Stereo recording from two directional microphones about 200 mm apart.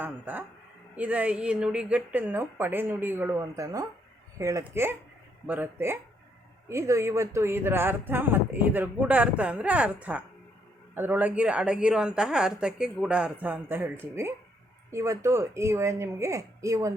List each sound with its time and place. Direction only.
0.0 s a woman's voice: 10° right (ahead or behind)